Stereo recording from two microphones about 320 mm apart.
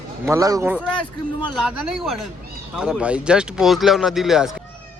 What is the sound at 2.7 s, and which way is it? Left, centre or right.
Speech, centre.